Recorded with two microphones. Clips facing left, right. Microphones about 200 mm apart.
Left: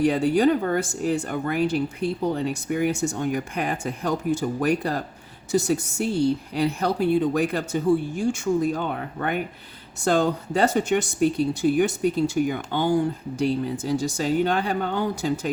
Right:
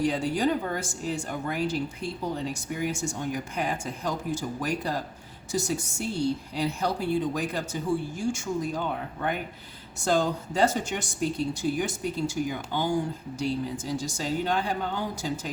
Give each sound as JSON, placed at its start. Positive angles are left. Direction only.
{"t": 0.0, "sound": "speech", "side_deg": 60}